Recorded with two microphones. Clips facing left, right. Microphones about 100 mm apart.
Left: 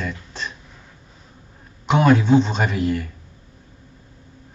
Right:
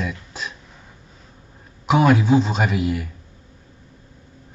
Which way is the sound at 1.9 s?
5° right (ahead or behind).